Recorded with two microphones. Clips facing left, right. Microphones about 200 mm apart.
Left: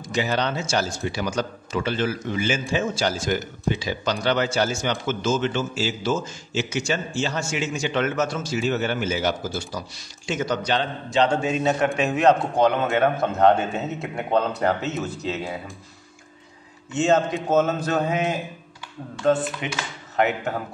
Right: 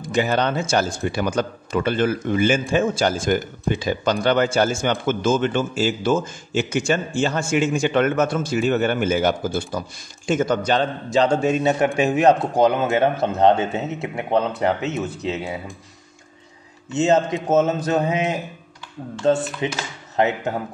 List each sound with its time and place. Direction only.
0.0 s speech: 50° right (ahead or behind)
12.6 s a man's voice: 25° right (ahead or behind)
16.9 s a man's voice: 20° right (ahead or behind)
19.6 s a man's voice: 30° right (ahead or behind)